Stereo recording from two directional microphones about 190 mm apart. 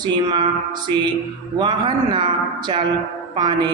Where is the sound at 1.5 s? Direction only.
25° right (ahead or behind).